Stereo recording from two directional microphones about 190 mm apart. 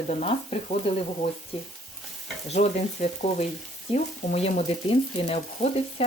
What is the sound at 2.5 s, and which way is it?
Speech, 35° left (ahead or behind).